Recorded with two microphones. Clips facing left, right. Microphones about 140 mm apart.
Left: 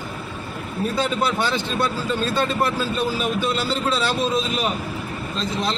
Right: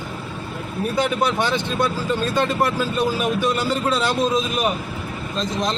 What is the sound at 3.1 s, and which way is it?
Speech, 15° right (ahead or behind).